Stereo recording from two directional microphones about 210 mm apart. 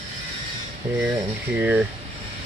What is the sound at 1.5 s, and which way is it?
Speech, 5° right (ahead or behind).